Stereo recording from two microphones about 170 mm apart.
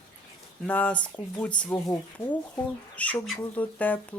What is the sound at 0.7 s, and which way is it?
Speech, 10° left (ahead or behind).